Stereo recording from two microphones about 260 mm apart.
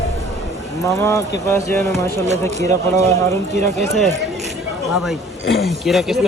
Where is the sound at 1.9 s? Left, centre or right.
Right.